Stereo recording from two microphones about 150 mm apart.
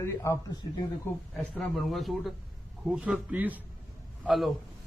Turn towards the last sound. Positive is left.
turn(degrees=0)  # may be behind; listen again after turning